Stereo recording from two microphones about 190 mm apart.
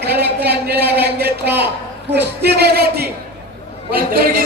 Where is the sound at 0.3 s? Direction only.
60° right (ahead or behind).